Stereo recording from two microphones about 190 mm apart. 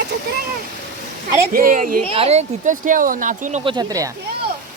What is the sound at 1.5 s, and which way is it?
Speech, 45° right (ahead or behind).